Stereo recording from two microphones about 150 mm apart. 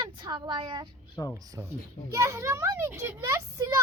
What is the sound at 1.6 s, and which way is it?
A child's voice, 15° right (ahead or behind).